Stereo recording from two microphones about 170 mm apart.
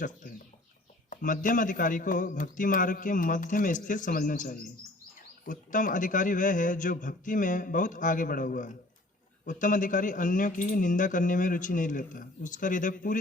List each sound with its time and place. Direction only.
0.0 s speech: 50° left (ahead or behind)